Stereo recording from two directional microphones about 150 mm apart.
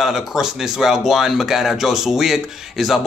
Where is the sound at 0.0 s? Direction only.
Centre (ahead or behind).